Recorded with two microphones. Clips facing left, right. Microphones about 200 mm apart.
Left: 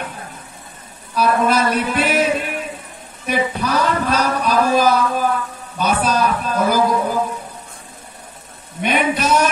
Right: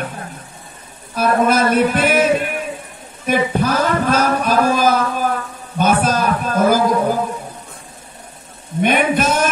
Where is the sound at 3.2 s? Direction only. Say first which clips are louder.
Right 3 dB; 50° right (ahead or behind).